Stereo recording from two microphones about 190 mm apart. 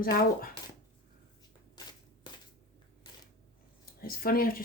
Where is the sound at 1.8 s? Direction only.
20° left (ahead or behind).